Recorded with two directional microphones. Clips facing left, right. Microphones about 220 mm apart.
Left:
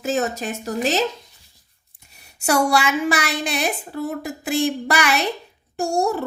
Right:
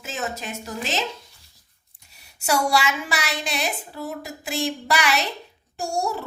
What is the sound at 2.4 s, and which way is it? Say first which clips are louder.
A woman's voice: left 3 dB; 50° left (ahead or behind).